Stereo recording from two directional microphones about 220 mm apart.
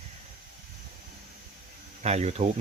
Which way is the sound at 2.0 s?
30° right (ahead or behind).